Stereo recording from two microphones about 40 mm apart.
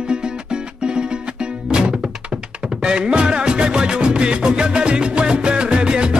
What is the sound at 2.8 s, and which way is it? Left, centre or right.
Music, right.